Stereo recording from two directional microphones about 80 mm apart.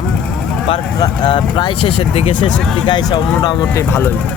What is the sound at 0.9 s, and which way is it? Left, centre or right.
Speech, left.